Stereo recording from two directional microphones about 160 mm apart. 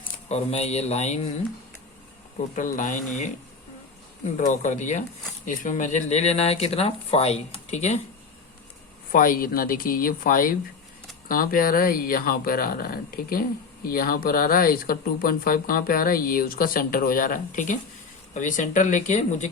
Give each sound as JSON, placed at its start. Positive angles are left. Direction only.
{"t": 0.3, "sound": "speech", "side_deg": 40}
{"t": 2.6, "sound": "speech", "side_deg": 55}
{"t": 4.4, "sound": "speech", "side_deg": 50}
{"t": 9.1, "sound": "speech", "side_deg": 65}